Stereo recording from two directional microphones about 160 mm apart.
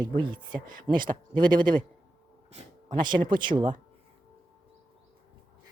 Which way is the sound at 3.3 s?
30° right (ahead or behind).